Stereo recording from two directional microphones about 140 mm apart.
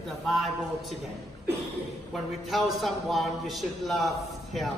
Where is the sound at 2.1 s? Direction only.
Centre (ahead or behind).